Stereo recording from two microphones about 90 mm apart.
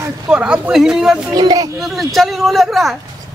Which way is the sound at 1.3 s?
45° right (ahead or behind).